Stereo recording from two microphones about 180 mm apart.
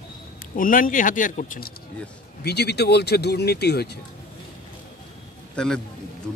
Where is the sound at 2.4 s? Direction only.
65° left (ahead or behind).